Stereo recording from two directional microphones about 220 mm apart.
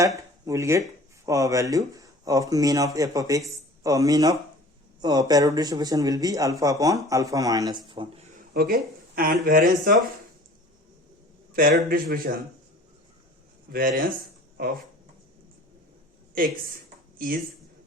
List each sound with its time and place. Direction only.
0.4 s speech: 15° right (ahead or behind)
8.5 s speech: 45° right (ahead or behind)
11.5 s speech: 40° right (ahead or behind)
13.7 s speech: 40° right (ahead or behind)